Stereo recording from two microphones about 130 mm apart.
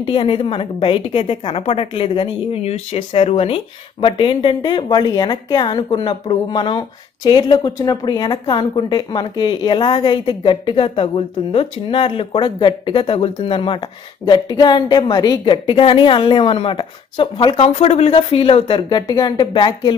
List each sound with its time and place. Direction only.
0.0 s a woman's voice: 40° left (ahead or behind)
17.6 s speech: 50° left (ahead or behind)